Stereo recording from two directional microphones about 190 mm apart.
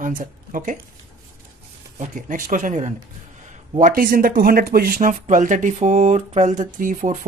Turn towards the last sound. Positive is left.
turn(degrees=-45)  # may be behind; listen again after turning